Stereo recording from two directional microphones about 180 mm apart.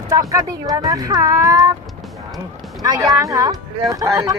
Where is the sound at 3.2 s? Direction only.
15° right (ahead or behind).